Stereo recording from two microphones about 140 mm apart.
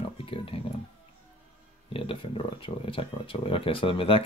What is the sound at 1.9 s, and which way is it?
Speech, 40° left (ahead or behind).